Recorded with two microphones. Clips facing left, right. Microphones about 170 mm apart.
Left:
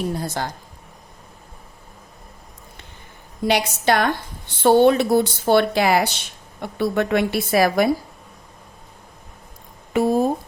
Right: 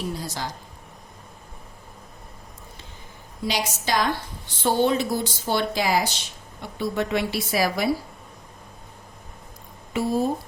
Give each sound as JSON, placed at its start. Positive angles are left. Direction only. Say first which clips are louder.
{"t": 0.1, "sound": "speech", "louder": "left 5 dB", "side_deg": 55}
{"t": 3.4, "sound": "speech", "louder": "left 8 dB", "side_deg": 60}
{"t": 9.9, "sound": "speech", "louder": "left 5 dB", "side_deg": 50}